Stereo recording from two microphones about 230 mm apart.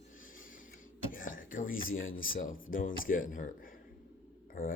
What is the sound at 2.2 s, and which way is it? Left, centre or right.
Speech, left.